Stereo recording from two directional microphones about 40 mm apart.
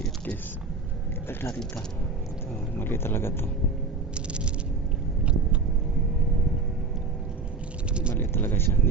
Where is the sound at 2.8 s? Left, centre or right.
Left.